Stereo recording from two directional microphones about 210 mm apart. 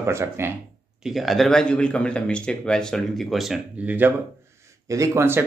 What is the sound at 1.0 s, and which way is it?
A man's voice, centre (ahead or behind).